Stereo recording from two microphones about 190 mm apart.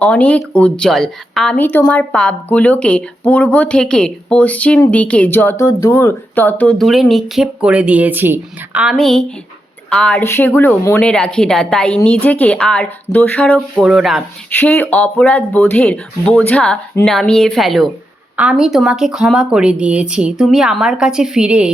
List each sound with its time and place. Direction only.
0.0 s a woman's voice: 5° left (ahead or behind)
13.7 s speech: 5° right (ahead or behind)
14.6 s speech: 10° left (ahead or behind)